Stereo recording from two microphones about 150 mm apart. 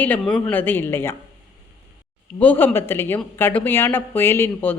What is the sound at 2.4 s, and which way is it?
Speech, 10° left (ahead or behind).